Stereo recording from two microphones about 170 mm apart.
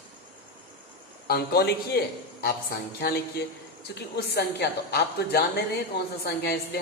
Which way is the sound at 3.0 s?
65° left (ahead or behind).